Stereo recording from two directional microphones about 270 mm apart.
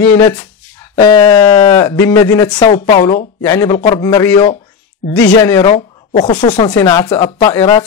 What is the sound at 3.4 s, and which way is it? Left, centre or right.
Speech, centre.